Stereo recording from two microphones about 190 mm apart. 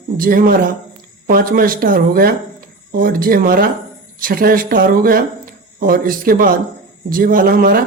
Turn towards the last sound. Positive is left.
turn(degrees=-50)  # may be behind; listen again after turning